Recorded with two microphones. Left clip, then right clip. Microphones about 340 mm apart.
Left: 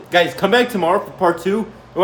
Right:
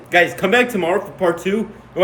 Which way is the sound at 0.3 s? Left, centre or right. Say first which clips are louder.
Even; centre.